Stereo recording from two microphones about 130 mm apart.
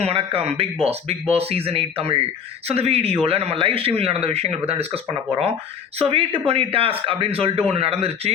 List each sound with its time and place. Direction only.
0.0 s speech: 50° right (ahead or behind)
6.0 s speech: 45° right (ahead or behind)